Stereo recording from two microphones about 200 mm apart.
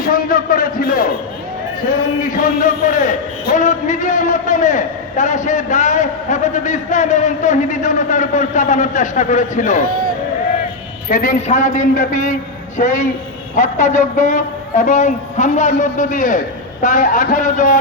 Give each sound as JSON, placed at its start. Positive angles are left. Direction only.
{"t": 0.0, "sound": "a man's voice", "side_deg": 45}
{"t": 2.2, "sound": "a man's voice", "side_deg": 40}
{"t": 11.1, "sound": "a man's voice", "side_deg": 40}